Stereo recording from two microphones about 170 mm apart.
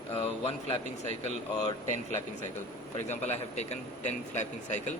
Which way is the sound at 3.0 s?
40° left (ahead or behind).